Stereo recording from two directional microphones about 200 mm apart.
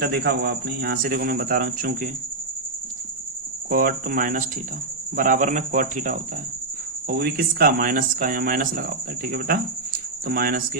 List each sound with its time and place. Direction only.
0.0 s speech: 50° right (ahead or behind)
3.7 s speech: 45° right (ahead or behind)